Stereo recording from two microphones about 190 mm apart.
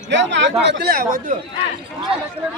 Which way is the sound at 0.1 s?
75° right (ahead or behind).